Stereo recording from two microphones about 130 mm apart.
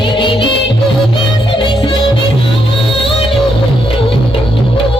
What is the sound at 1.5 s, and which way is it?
Music, 35° left (ahead or behind).